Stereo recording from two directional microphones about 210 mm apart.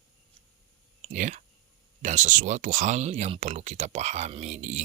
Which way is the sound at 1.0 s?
35° right (ahead or behind).